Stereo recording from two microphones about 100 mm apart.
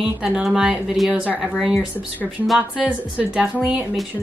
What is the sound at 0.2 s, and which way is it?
Speech, 5° right (ahead or behind).